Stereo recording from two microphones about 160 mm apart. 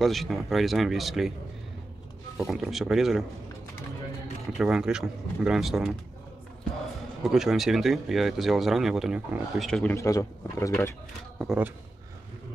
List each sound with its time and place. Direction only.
0.0 s speech: centre (ahead or behind)
2.3 s speech: centre (ahead or behind)
4.5 s speech: 5° right (ahead or behind)
7.2 s speech: centre (ahead or behind)
9.9 s a man's voice: 20° left (ahead or behind)
11.3 s speech: 5° right (ahead or behind)